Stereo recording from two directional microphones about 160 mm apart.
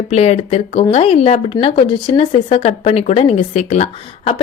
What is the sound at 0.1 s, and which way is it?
Speech, 40° left (ahead or behind).